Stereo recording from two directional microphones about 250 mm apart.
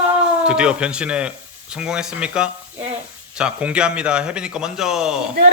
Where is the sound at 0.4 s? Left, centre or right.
Centre.